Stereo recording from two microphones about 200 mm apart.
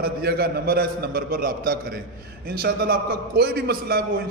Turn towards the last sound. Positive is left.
turn(degrees=-50)  # may be behind; listen again after turning